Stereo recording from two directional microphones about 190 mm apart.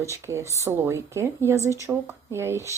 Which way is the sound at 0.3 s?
15° right (ahead or behind).